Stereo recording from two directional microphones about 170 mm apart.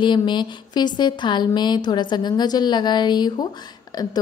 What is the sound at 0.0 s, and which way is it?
A woman's voice, 25° left (ahead or behind).